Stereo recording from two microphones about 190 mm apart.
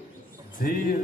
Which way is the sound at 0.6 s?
45° left (ahead or behind).